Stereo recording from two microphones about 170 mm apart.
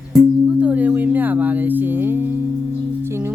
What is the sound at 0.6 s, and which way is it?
Music, 10° right (ahead or behind).